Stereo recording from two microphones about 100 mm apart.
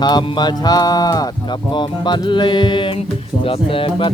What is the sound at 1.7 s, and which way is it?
Music, 50° left (ahead or behind).